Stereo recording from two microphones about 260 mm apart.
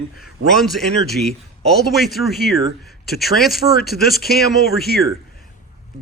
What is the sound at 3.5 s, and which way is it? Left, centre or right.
Speech, left.